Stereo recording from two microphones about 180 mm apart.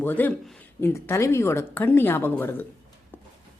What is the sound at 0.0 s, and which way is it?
Speech, 10° left (ahead or behind).